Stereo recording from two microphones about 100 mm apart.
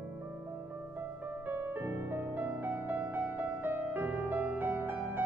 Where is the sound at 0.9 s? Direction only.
20° right (ahead or behind).